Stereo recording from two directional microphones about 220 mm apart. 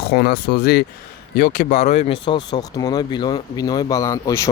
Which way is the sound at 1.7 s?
30° left (ahead or behind).